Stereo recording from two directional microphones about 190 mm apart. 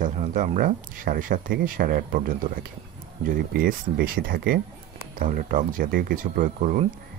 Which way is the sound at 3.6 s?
50° right (ahead or behind).